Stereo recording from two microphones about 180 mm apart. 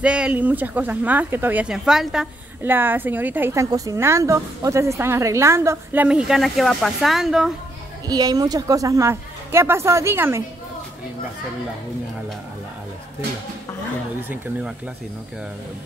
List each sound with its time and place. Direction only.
0.0 s speech: 5° right (ahead or behind)
8.1 s speech: 20° right (ahead or behind)
14.3 s speech: 10° right (ahead or behind)